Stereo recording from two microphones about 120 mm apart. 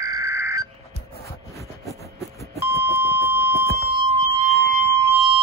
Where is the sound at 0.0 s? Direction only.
25° right (ahead or behind).